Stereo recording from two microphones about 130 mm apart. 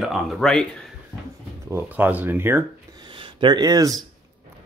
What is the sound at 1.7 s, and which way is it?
Speech, 15° right (ahead or behind).